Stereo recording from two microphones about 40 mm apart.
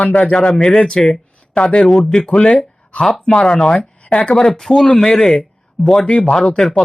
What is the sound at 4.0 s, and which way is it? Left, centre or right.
Speech, left.